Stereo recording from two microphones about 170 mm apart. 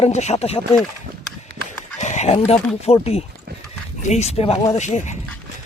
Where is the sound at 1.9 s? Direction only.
45° left (ahead or behind).